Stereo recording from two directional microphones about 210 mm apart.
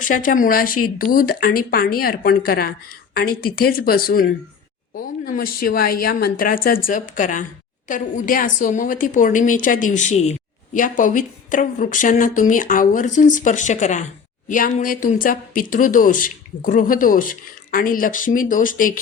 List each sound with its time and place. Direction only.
0.0 s a woman's voice: 40° left (ahead or behind)